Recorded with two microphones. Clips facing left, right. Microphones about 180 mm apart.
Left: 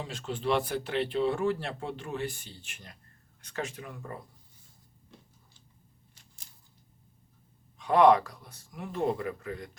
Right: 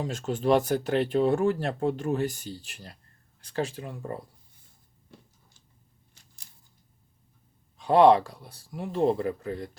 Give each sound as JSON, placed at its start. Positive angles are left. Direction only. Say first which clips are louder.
{"t": 0.0, "sound": "speech", "louder": "right 6 dB", "side_deg": -45}
{"t": 7.8, "sound": "speech", "louder": "right 3 dB", "side_deg": -30}